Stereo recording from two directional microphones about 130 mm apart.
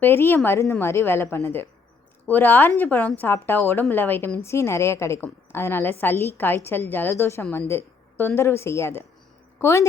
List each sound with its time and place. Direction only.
0.0 s a woman's voice: 15° left (ahead or behind)
7.7 s a sound: 15° left (ahead or behind)
8.4 s a woman's voice: 20° left (ahead or behind)